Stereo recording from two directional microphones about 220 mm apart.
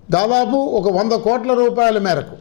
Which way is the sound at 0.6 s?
30° left (ahead or behind).